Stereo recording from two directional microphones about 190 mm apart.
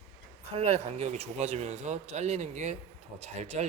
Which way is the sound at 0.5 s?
30° right (ahead or behind).